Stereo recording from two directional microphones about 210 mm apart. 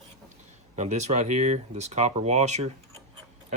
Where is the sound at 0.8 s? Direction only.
35° right (ahead or behind).